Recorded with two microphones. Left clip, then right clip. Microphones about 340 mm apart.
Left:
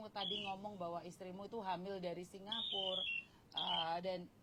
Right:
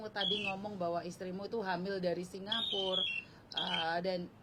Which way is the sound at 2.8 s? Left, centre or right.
Centre.